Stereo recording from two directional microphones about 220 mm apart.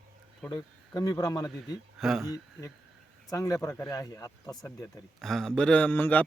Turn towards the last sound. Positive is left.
turn(degrees=10)  # may be behind; listen again after turning